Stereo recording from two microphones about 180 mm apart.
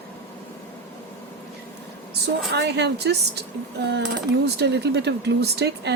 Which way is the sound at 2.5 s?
70° right (ahead or behind).